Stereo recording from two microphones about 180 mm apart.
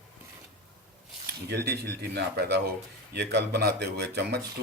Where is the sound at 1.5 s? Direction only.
65° right (ahead or behind).